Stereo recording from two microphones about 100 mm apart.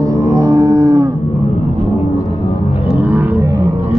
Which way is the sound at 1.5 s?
90° left.